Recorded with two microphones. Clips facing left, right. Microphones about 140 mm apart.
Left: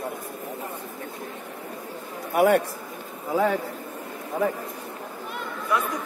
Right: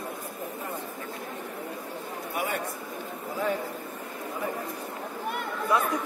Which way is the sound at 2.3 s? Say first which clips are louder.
Left 13 dB; 70° left (ahead or behind).